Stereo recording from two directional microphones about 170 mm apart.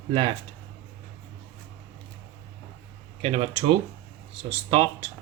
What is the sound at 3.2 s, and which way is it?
Speech, 45° right (ahead or behind).